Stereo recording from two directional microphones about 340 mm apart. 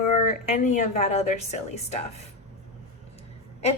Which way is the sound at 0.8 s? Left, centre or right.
Centre.